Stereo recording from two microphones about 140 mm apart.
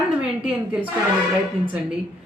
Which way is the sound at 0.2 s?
10° right (ahead or behind).